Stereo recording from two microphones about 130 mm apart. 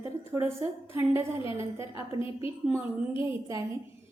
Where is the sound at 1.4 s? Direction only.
45° left (ahead or behind).